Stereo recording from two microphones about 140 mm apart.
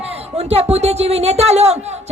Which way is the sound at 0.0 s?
45° right (ahead or behind).